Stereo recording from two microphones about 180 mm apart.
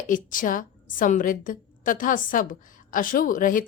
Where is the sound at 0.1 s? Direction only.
50° left (ahead or behind).